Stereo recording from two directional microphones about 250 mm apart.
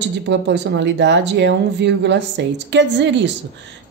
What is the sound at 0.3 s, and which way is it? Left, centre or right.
A woman's voice, right.